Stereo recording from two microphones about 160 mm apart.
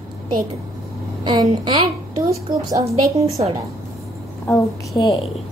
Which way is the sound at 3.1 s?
40° right (ahead or behind).